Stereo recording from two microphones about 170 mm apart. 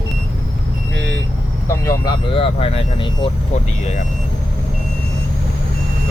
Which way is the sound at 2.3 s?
35° left (ahead or behind).